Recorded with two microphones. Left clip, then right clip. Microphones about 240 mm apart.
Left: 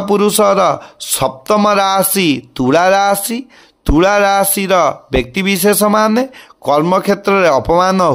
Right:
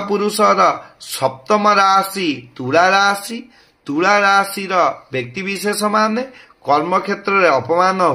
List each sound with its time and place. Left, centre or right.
0.1 s speech: left